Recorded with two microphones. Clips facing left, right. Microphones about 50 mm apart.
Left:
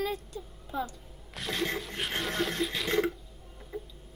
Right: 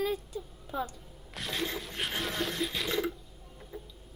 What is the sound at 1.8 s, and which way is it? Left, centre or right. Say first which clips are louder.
A woman's voice: left 1 dB; centre.